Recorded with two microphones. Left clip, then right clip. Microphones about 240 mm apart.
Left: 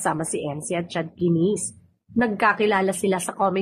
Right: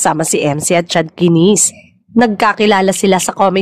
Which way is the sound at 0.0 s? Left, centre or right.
Right.